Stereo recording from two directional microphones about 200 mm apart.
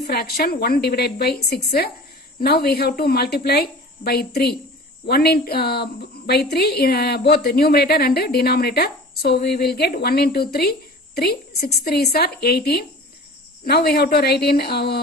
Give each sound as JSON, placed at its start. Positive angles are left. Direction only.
{"t": 0.0, "sound": "a woman's voice", "side_deg": 50}